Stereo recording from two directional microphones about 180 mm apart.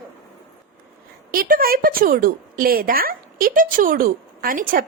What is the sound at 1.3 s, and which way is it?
A woman's voice, 55° right (ahead or behind).